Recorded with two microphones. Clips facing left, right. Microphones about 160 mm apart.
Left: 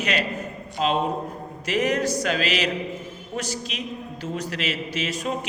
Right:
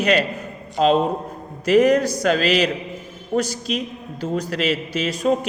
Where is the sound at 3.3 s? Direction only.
50° right (ahead or behind).